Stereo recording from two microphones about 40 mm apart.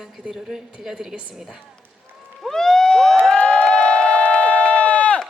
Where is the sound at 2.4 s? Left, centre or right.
Centre.